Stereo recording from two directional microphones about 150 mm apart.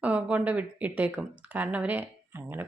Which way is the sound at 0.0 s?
10° right (ahead or behind).